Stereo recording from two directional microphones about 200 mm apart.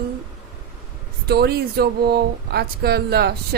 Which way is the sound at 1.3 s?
55° right (ahead or behind).